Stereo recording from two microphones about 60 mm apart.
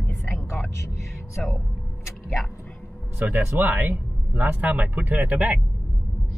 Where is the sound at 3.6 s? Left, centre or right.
Right.